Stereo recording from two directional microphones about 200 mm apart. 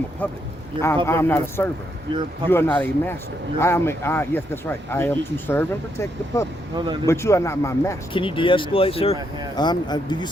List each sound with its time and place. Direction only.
0.2 s speech: 10° left (ahead or behind)
2.1 s speech: 25° right (ahead or behind)
2.5 s speech: 10° left (ahead or behind)
6.7 s speech: 20° right (ahead or behind)
7.1 s speech: 15° left (ahead or behind)
8.1 s speech: 25° left (ahead or behind)